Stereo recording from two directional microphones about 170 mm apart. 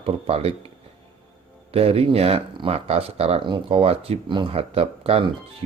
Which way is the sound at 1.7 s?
35° right (ahead or behind).